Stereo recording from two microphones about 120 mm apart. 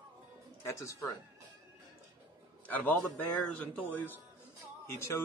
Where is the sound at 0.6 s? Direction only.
25° left (ahead or behind).